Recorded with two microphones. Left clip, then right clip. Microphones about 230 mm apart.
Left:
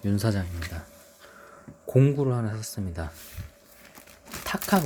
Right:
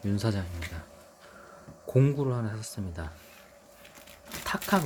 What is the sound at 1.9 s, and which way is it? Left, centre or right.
Speech, centre.